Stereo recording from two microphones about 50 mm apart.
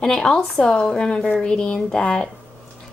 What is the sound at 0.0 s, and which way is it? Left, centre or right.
Speech, centre.